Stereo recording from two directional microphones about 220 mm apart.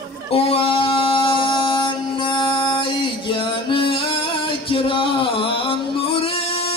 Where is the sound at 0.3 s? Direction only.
25° left (ahead or behind).